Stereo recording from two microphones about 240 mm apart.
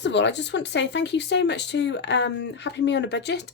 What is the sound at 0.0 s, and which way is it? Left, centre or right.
Speech, left.